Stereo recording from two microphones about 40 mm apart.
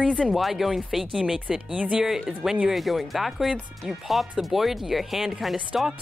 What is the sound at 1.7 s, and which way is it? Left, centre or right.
Speech, right.